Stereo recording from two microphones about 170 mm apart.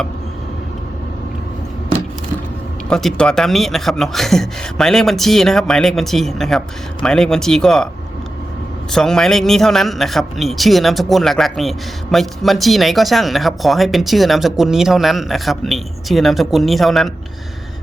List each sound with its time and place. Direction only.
2.9 s speech: 5° left (ahead or behind)
8.9 s speech: 5° left (ahead or behind)